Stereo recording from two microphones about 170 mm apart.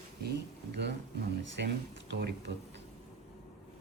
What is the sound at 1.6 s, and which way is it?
Speech, 80° right.